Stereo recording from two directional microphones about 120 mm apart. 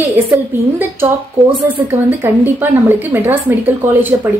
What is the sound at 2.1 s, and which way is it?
A woman's voice, 15° right (ahead or behind).